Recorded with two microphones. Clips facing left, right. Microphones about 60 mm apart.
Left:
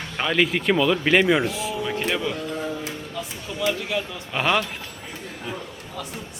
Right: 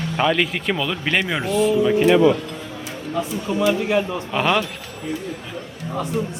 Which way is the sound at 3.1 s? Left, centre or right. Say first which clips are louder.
Right 12 dB; right.